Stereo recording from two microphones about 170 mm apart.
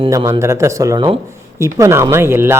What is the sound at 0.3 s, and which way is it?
Speech, 15° right (ahead or behind).